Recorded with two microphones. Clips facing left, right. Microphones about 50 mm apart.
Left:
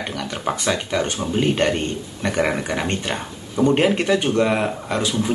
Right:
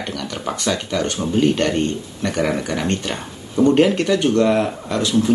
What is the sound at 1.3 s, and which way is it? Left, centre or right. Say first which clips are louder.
Speech: right 2 dB; centre.